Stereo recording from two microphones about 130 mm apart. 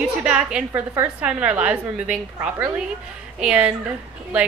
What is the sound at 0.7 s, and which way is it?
Speech, 20° right (ahead or behind).